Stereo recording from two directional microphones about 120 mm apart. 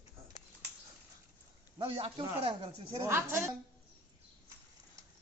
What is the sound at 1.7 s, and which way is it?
A man's voice, 50° right (ahead or behind).